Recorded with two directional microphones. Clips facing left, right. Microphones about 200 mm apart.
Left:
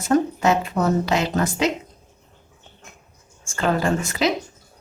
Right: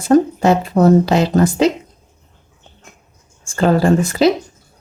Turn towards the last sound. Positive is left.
turn(degrees=-35)  # may be behind; listen again after turning